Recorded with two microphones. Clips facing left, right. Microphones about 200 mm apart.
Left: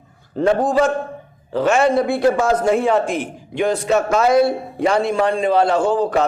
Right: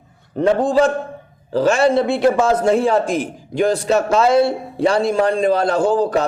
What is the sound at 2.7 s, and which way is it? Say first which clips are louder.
A man's voice: right 1 dB; 35° right (ahead or behind).